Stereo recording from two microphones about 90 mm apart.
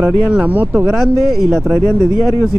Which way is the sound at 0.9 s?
Centre (ahead or behind).